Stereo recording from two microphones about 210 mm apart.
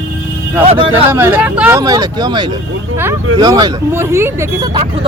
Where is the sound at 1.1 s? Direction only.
10° right (ahead or behind).